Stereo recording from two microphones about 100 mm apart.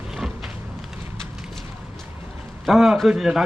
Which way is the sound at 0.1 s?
5° right (ahead or behind).